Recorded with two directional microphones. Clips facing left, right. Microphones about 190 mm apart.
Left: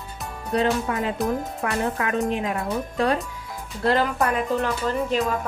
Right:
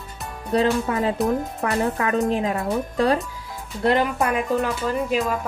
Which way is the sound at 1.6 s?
35° right (ahead or behind).